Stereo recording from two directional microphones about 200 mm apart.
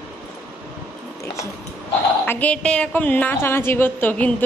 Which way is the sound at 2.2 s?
10° left (ahead or behind).